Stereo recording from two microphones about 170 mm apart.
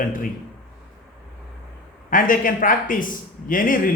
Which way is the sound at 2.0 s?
55° left (ahead or behind).